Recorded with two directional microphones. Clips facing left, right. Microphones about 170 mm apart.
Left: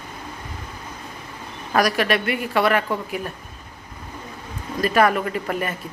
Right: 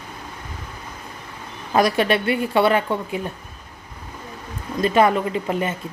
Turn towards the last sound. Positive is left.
turn(degrees=-25)  # may be behind; listen again after turning